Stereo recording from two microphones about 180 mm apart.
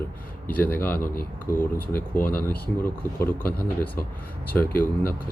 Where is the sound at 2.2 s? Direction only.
55° left (ahead or behind).